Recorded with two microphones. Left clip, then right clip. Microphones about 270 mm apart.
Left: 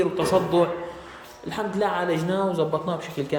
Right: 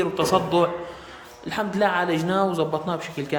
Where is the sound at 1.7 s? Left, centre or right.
Centre.